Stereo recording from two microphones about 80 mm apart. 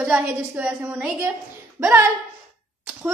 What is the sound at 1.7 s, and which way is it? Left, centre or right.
Speech, right.